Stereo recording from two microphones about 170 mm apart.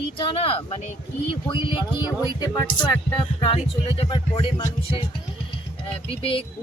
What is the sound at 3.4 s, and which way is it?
Speech, 35° left (ahead or behind).